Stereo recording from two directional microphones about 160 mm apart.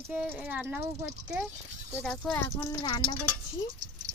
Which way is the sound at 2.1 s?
5° left (ahead or behind).